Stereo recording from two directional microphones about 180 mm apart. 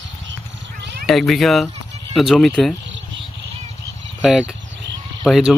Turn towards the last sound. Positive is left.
turn(degrees=0)  # may be behind; listen again after turning